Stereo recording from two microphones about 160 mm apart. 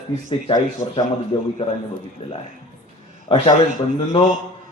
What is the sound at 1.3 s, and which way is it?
A man's voice, 30° left (ahead or behind).